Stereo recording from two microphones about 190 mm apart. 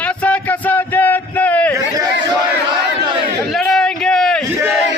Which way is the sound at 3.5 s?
Centre (ahead or behind).